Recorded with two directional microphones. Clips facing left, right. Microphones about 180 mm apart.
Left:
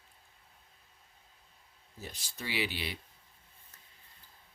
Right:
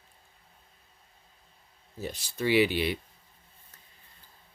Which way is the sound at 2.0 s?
60° right (ahead or behind).